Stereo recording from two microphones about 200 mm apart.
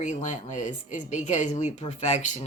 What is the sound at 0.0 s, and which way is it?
Speech, 35° left (ahead or behind).